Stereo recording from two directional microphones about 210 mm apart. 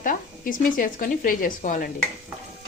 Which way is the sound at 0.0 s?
40° left (ahead or behind).